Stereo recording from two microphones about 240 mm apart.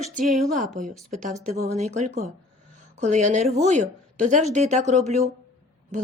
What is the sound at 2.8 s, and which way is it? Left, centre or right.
Speech, right.